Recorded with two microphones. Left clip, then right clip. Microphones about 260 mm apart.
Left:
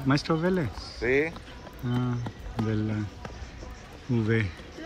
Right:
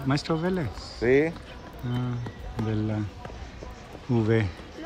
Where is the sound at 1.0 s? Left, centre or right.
Right.